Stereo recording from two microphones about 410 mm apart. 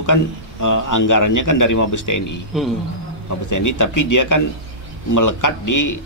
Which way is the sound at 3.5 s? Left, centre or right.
Left.